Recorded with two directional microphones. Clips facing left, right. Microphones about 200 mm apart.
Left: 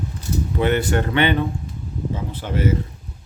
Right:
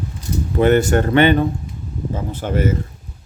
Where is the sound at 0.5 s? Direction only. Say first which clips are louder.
Right 6 dB; 45° right (ahead or behind).